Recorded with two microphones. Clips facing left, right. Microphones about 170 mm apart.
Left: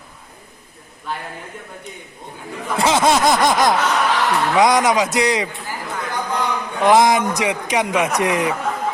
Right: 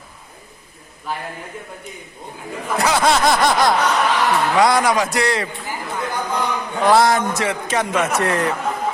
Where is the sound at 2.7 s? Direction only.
20° left (ahead or behind).